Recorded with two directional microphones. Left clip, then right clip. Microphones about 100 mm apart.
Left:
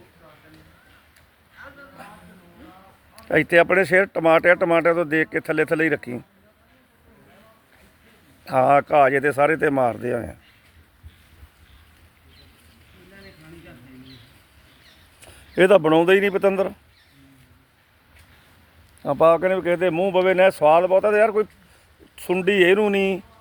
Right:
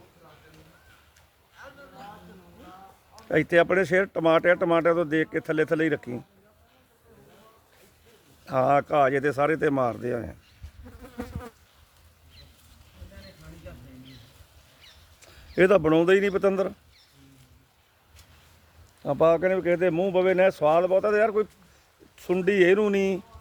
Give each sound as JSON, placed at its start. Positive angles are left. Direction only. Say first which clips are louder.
{"t": 3.2, "sound": "speech", "louder": "left 5 dB", "side_deg": 35}
{"t": 8.4, "sound": "speech", "louder": "left 5 dB", "side_deg": 25}
{"t": 15.2, "sound": "a sound", "louder": "left 4 dB", "side_deg": 15}
{"t": 15.8, "sound": "speech", "louder": "left 4 dB", "side_deg": 25}
{"t": 19.0, "sound": "speech", "louder": "left 5 dB", "side_deg": 15}